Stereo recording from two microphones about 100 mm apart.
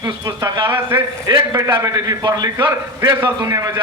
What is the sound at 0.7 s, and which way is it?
Speech, 20° right (ahead or behind).